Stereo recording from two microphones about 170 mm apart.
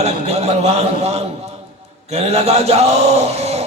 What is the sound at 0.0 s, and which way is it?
Speech, 40° right (ahead or behind).